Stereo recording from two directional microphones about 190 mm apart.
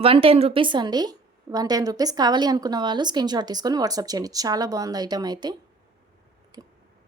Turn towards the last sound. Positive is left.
turn(degrees=-20)  # may be behind; listen again after turning